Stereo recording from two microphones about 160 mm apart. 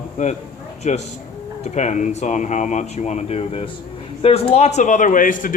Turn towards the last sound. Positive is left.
turn(degrees=55)  # may be behind; listen again after turning